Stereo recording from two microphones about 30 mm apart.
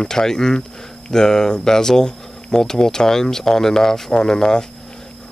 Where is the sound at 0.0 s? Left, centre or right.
Left.